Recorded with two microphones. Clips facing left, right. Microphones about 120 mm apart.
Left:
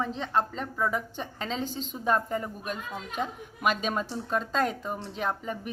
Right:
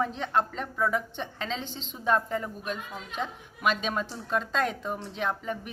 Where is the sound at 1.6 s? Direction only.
45° left (ahead or behind).